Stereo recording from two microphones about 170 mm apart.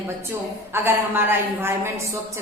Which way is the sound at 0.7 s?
15° right (ahead or behind).